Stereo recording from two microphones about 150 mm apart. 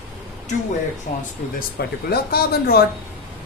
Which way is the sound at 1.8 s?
90° left.